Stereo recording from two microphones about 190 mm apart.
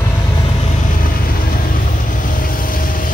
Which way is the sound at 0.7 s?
45° left (ahead or behind).